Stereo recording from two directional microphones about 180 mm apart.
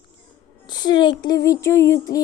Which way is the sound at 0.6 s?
25° left (ahead or behind).